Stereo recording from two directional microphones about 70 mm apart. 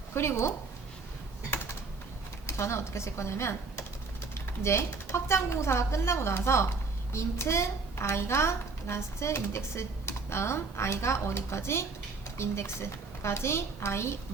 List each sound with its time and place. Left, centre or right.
0.1 s speech: left
2.5 s speech: left